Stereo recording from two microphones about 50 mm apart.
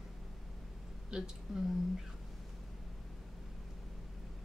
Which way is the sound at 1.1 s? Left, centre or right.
Centre.